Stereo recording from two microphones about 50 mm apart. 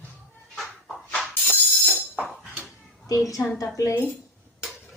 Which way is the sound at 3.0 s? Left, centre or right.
Left.